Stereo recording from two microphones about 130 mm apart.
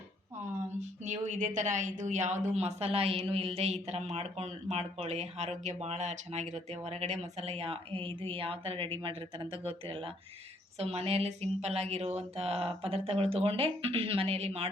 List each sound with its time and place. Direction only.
0.8 s speech: 65° right (ahead or behind)